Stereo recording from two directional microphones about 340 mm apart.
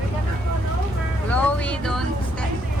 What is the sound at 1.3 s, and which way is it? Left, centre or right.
Speech, centre.